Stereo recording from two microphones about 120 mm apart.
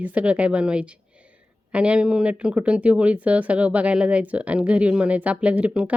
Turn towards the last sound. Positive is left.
turn(degrees=-10)  # may be behind; listen again after turning